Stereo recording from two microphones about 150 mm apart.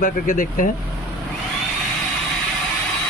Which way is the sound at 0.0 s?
65° left (ahead or behind).